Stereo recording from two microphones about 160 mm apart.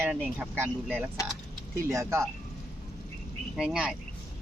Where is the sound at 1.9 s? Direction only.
15° right (ahead or behind).